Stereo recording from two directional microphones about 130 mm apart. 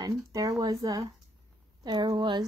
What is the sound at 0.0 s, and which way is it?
A woman's voice, 25° right (ahead or behind).